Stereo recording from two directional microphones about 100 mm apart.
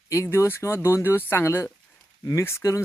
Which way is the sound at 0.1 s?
30° left (ahead or behind).